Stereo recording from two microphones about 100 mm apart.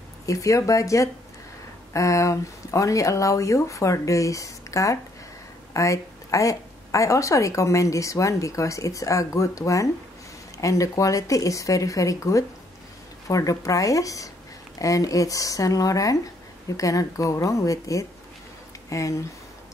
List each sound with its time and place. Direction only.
0.3 s a woman's voice: 35° left (ahead or behind)